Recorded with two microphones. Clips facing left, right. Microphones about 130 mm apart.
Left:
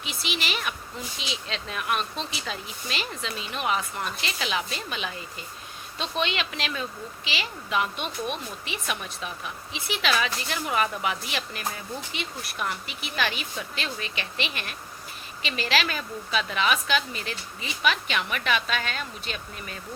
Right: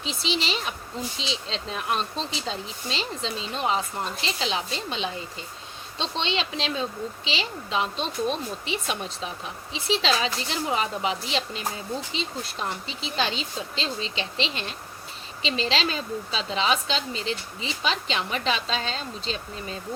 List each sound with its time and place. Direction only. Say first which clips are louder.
0.0 s speech: right 4 dB; 30° right (ahead or behind)